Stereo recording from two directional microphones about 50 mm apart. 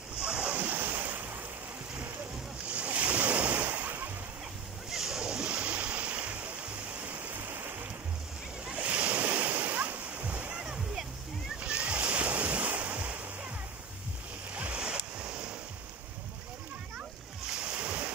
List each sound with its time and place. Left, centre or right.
0.2 s waves: right
2.7 s waves: right
4.9 s splash: centre; by 6.5 s right
7.1 s waterfall: right
8.6 s waves: right
14.5 s waves: right
17.5 s waves: centre